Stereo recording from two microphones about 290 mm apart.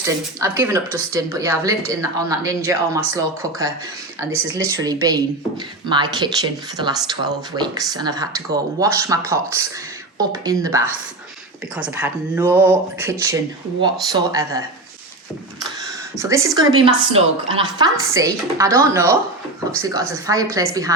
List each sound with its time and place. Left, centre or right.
0.0 s a woman's voice: centre
16.1 s a woman's voice: centre